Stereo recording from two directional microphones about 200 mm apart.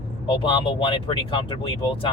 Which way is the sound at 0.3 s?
25° left (ahead or behind).